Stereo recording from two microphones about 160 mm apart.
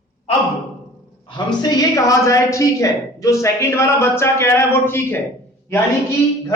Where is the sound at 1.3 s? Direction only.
25° left (ahead or behind).